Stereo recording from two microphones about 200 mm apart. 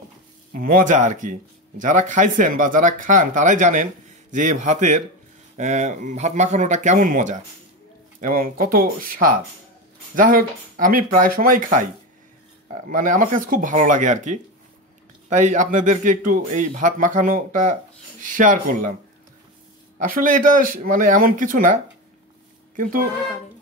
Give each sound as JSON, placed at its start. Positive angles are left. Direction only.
{"t": 0.5, "sound": "speech", "side_deg": -45}
{"t": 20.0, "sound": "speech", "side_deg": -40}
{"t": 22.8, "sound": "speech", "side_deg": -45}